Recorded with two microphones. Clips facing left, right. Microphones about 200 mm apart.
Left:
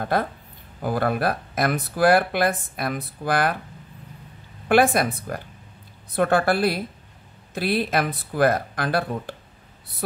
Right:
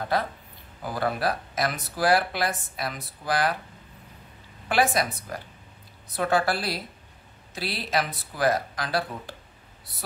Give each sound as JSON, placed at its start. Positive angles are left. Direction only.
{"t": 0.0, "sound": "speech", "side_deg": 55}
{"t": 4.6, "sound": "speech", "side_deg": 55}